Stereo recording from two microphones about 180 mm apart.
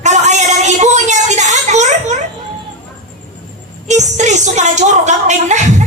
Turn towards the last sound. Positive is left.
turn(degrees=-40)  # may be behind; listen again after turning